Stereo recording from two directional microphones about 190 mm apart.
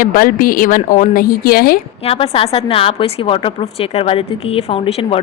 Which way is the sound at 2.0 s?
30° left (ahead or behind).